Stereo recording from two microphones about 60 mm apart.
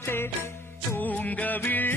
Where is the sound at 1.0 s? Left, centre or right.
Left.